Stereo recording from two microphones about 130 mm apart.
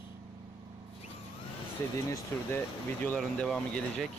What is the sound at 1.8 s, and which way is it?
Speech, 20° left (ahead or behind).